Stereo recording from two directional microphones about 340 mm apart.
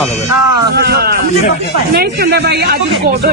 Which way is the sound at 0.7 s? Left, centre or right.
Right.